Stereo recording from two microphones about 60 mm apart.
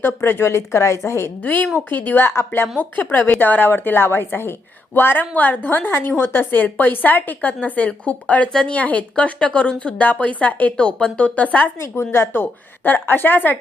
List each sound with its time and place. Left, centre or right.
0.0 s a woman's voice: left
1.4 s a woman's voice: left
2.7 s a woman's voice: left
12.1 s a woman's voice: left